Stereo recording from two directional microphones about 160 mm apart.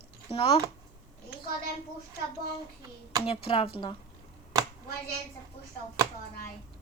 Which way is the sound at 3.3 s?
35° left (ahead or behind).